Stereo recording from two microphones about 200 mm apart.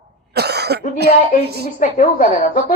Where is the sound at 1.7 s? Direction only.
35° left (ahead or behind).